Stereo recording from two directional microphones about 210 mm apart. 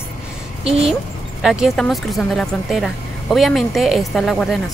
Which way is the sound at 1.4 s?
Centre (ahead or behind).